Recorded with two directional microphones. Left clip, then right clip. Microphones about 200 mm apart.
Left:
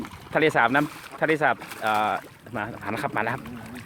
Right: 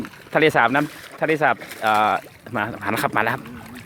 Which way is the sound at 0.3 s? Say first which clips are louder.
Right 4 dB; 20° right (ahead or behind).